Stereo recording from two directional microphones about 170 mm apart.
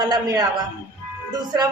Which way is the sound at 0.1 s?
20° right (ahead or behind).